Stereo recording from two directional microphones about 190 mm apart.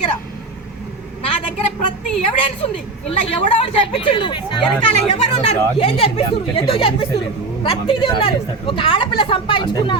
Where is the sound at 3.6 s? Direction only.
25° left (ahead or behind).